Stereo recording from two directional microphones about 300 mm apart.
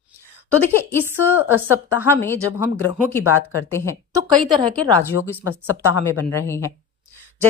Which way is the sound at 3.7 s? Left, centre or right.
Centre.